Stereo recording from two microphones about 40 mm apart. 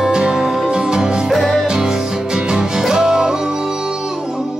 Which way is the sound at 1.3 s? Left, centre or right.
Centre.